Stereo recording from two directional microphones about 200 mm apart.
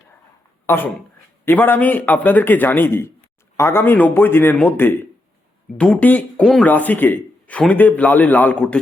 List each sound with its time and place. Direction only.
1.5 s speech: 10° left (ahead or behind)